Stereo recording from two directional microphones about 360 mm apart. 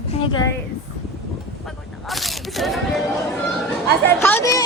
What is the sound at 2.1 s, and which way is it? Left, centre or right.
Speech, centre.